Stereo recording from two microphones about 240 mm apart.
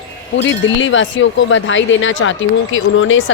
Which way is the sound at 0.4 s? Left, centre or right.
Left.